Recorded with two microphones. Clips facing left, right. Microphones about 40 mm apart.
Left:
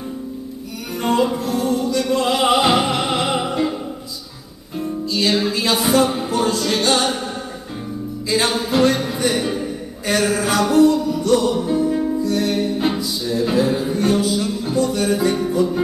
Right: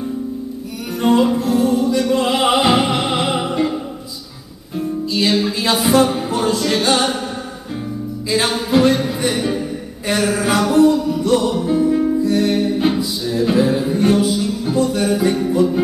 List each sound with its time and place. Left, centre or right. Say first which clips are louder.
1.0 s music: right 4 dB; centre
4.7 s music: right 2 dB; centre
8.3 s music: right 2 dB; centre
10.0 s a sound: even; centre
10.6 s music: even; centre
13.2 s a sound: right 2 dB; centre
15.1 s music: right 2 dB; centre